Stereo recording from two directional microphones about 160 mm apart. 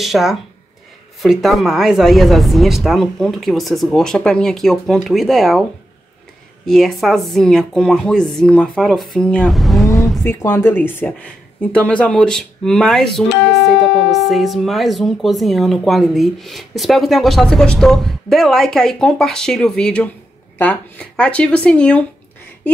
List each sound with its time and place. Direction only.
0.0 s speech: centre (ahead or behind)
9.8 s vehicle: 20° left (ahead or behind)
10.2 s speech: 15° left (ahead or behind)